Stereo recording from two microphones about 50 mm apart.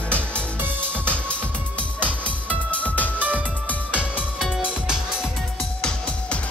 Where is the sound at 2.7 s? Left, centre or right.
Left.